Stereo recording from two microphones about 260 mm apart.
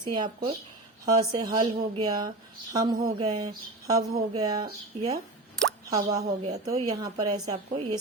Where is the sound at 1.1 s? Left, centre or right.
Centre.